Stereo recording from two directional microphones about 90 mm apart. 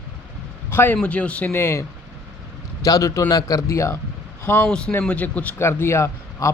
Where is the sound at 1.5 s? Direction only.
30° left (ahead or behind).